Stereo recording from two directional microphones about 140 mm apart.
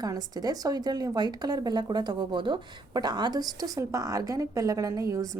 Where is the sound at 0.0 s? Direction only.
25° right (ahead or behind).